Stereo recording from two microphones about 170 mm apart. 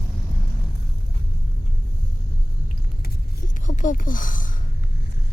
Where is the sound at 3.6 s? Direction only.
50° left (ahead or behind).